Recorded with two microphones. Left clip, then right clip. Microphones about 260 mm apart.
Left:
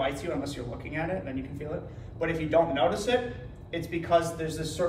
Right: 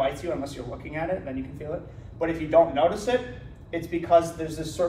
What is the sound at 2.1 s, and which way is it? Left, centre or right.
A man's voice, centre.